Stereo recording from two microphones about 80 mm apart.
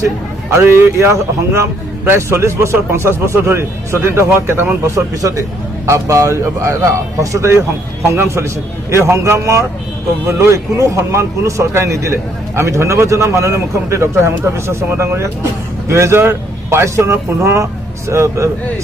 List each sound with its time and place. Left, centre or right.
0.6 s speech: right
5.2 s speech: right